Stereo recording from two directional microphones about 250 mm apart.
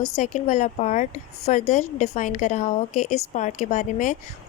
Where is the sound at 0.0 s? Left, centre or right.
Left.